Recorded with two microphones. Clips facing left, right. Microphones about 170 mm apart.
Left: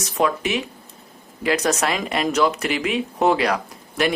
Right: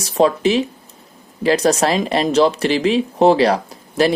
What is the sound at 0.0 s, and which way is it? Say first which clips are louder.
Speech: right 7 dB; 30° right (ahead or behind).